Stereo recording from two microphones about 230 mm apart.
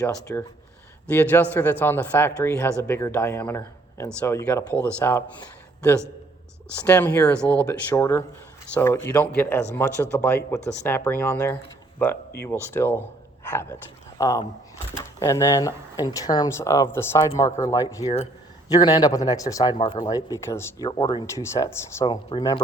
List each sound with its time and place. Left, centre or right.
0.0 s speech: centre
6.8 s speech: centre
12.7 s speech: centre
18.0 s speech: left